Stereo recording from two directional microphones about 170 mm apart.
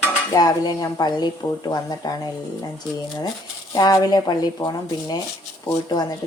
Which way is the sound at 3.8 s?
20° left (ahead or behind).